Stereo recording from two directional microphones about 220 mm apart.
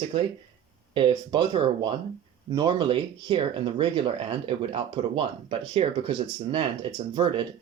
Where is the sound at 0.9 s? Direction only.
20° right (ahead or behind).